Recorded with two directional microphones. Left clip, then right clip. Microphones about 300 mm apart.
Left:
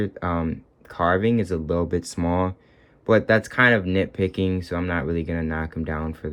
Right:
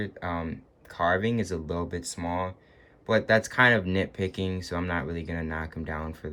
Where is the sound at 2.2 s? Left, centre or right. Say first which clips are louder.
Left 6 dB; left.